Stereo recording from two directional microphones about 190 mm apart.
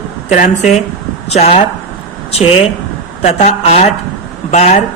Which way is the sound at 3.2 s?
35° left (ahead or behind).